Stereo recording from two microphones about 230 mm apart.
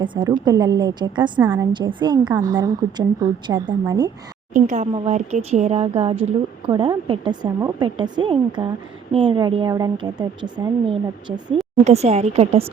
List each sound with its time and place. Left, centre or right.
0.0 s a woman's voice: centre
4.5 s speech: right